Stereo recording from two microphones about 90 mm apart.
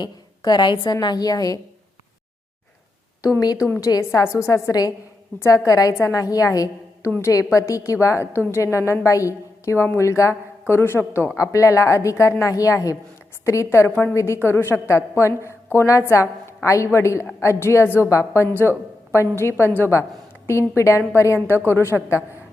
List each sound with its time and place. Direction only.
0.0 s a woman's voice: 50° left (ahead or behind)
3.8 s a woman's voice: 35° left (ahead or behind)
18.4 s a woman's voice: 20° left (ahead or behind)